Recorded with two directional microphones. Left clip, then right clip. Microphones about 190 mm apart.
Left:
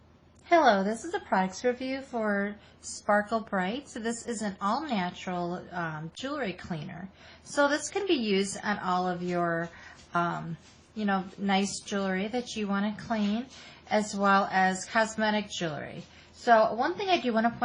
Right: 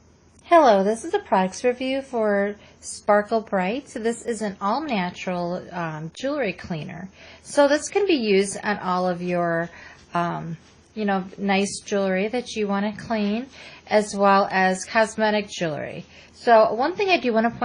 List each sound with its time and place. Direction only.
0.4 s a woman's voice: 35° right (ahead or behind)